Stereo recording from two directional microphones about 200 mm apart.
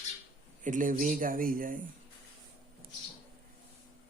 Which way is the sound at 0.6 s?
40° right (ahead or behind).